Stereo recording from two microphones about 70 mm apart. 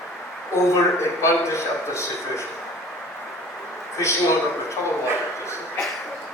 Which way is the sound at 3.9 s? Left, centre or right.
Left.